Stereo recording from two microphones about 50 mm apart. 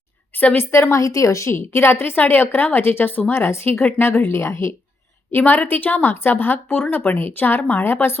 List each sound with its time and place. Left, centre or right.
0.3 s a woman's voice: left
0.6 s a woman's voice: left
3.3 s a woman's voice: left
5.5 s a woman's voice: left